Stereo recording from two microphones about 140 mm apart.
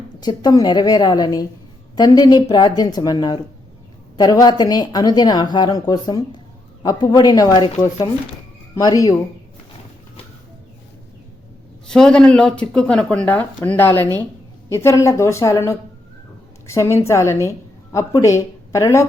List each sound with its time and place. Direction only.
0.2 s speech: 30° left (ahead or behind)
8.7 s speech: 25° left (ahead or behind)
11.9 s speech: 5° left (ahead or behind); by 19.0 s 20° left (ahead or behind)